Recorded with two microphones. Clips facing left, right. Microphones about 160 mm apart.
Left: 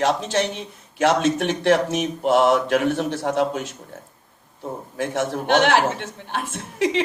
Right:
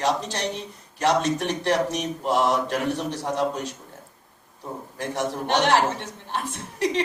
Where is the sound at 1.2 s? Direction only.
80° left.